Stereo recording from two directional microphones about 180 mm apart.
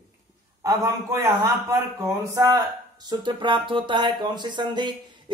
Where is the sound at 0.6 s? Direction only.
20° right (ahead or behind).